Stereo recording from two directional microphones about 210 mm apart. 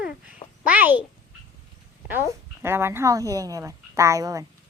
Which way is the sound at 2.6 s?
10° right (ahead or behind).